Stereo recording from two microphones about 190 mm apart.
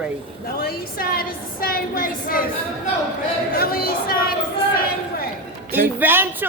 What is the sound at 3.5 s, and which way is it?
Speech, 50° left (ahead or behind).